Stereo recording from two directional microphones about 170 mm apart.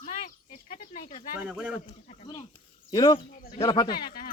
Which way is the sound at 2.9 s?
20° left (ahead or behind).